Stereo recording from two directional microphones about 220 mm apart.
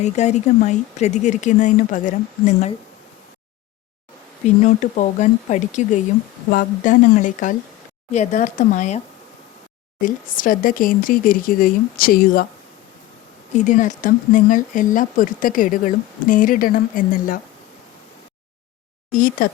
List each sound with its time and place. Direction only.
0.0 s speech: 30° left (ahead or behind)
4.4 s speech: 35° left (ahead or behind)
10.0 s speech: 40° left (ahead or behind)
13.5 s speech: 35° left (ahead or behind)
19.1 s speech: 40° left (ahead or behind)